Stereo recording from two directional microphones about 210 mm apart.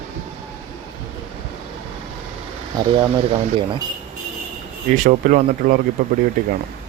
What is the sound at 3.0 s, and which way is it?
Speech, 25° right (ahead or behind).